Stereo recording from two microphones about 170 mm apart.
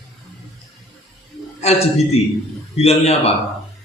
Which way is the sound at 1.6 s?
40° left (ahead or behind).